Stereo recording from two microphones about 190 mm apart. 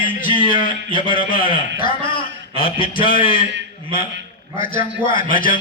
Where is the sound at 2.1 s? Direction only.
25° left (ahead or behind).